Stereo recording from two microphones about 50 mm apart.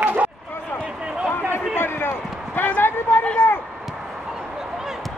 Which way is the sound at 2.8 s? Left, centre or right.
Left.